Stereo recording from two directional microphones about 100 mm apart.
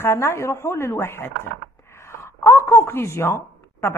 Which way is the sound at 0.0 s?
25° left (ahead or behind).